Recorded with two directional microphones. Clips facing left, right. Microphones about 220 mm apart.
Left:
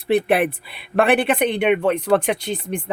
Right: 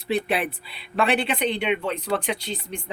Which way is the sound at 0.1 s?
55° left (ahead or behind).